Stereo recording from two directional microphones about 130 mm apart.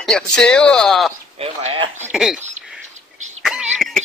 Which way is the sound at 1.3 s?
45° right (ahead or behind).